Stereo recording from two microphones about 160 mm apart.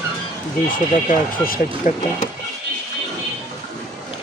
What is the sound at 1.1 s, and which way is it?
Speech, 60° left (ahead or behind).